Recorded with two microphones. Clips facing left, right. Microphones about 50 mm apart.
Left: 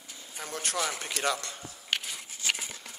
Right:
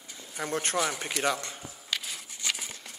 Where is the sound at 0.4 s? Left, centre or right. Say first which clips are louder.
Right 5 dB; right.